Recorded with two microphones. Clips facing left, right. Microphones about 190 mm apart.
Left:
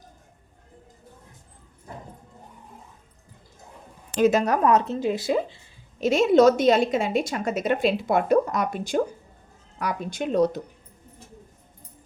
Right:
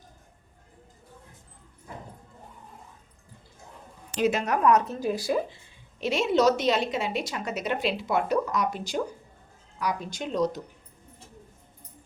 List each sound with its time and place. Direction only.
4.2 s speech: 40° left (ahead or behind); by 5.5 s 25° left (ahead or behind)
6.0 s a woman's voice: 45° left (ahead or behind)